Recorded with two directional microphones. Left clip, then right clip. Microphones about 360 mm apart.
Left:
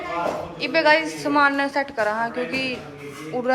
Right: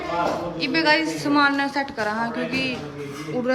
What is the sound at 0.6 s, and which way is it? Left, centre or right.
A woman's voice, centre.